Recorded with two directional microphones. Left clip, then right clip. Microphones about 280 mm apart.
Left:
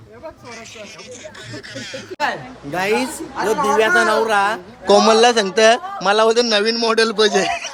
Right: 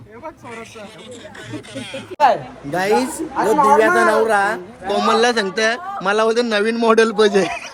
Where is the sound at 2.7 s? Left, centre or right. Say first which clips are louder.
Right 2 dB; centre.